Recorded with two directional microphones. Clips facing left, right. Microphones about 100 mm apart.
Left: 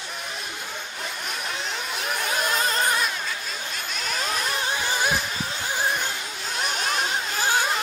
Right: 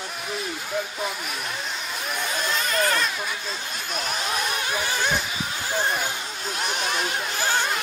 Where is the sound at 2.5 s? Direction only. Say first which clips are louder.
Even; 35° left (ahead or behind).